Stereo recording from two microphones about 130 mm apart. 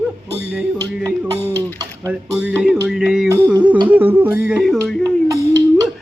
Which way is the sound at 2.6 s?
5° right (ahead or behind).